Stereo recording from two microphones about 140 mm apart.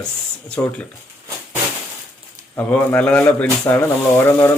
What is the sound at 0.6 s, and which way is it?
Rub, 15° left (ahead or behind).